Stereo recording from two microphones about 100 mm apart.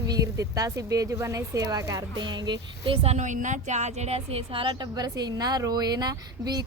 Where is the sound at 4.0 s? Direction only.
90° right; by 6.6 s 40° right (ahead or behind).